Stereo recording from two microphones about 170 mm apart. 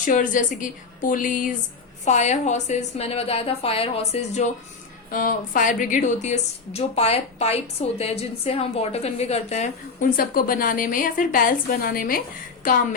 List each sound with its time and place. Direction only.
0.0 s a woman's voice: 50° left (ahead or behind)
5.1 s a woman's voice: 50° left (ahead or behind)